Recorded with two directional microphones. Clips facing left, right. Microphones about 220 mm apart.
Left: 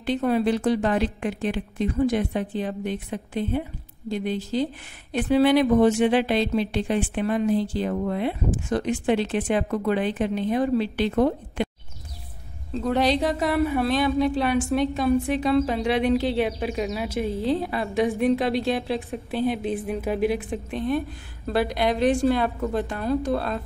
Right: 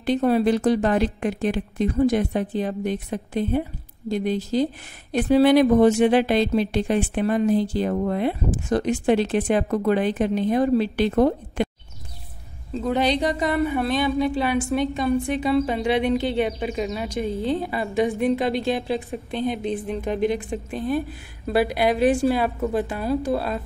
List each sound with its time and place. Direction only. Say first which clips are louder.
0.0 s a woman's voice: right 3 dB; 40° right (ahead or behind)
12.7 s a woman's voice: even; centre (ahead or behind)